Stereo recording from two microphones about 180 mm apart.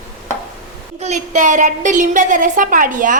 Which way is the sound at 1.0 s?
40° right (ahead or behind).